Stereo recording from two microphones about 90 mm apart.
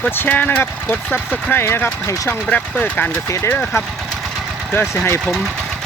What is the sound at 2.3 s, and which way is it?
Speech, 20° left (ahead or behind).